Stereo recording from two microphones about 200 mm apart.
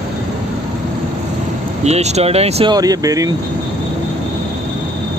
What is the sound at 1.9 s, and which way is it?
Speech, 35° right (ahead or behind).